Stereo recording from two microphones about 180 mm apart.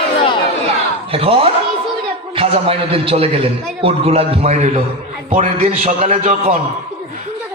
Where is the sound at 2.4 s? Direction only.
30° right (ahead or behind).